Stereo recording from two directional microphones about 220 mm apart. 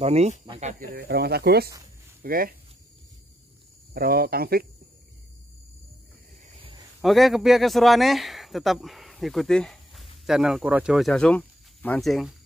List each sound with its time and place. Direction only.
0.0 s speech: 30° right (ahead or behind)
3.9 s speech: 45° right (ahead or behind)
7.0 s a man's voice: centre (ahead or behind)